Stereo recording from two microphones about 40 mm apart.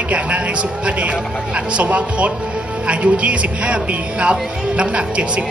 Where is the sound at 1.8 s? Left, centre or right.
Right.